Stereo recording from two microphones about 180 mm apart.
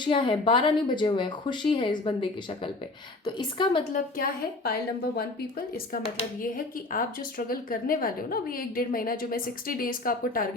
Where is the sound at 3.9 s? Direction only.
55° left (ahead or behind).